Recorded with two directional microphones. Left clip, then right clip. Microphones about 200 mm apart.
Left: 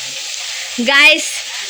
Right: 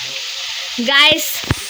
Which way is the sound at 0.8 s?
5° left (ahead or behind).